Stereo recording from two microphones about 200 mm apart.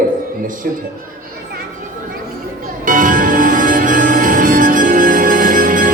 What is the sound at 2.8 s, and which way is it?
Music, 40° right (ahead or behind).